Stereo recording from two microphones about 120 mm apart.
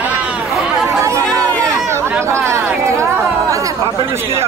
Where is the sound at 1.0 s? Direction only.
25° right (ahead or behind).